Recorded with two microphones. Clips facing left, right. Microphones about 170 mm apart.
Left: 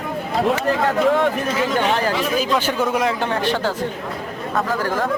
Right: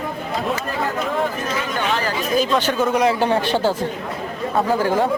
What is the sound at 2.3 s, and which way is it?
Speech, 10° left (ahead or behind).